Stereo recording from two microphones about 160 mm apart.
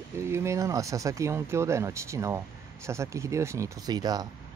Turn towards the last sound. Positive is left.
turn(degrees=-25)  # may be behind; listen again after turning